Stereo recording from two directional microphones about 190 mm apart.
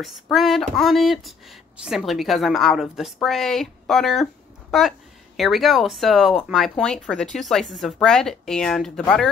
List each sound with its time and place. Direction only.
0.0 s a woman's voice: centre (ahead or behind)